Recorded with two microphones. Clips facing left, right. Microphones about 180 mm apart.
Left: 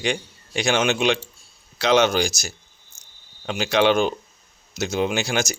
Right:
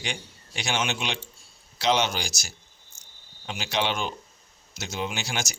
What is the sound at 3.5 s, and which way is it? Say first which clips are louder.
Speech: left 9 dB; 60° left (ahead or behind).